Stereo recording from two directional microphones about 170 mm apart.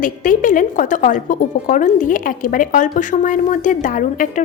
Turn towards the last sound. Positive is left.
turn(degrees=50)  # may be behind; listen again after turning